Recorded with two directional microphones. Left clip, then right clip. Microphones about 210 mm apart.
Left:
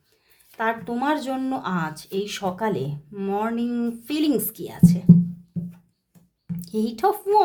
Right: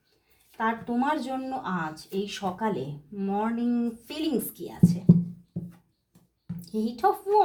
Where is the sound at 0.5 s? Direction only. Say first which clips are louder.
Left 3 dB; 50° left (ahead or behind).